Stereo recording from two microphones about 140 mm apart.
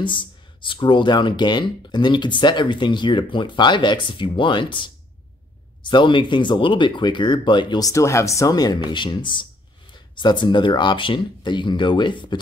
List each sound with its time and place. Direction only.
0.0 s speech: 35° left (ahead or behind)